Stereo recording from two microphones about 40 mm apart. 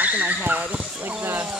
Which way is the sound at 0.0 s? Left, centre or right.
Right.